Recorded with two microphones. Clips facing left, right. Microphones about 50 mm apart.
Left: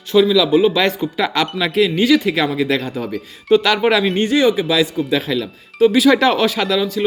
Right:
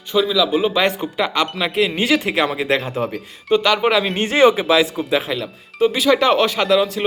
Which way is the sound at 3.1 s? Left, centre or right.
Centre.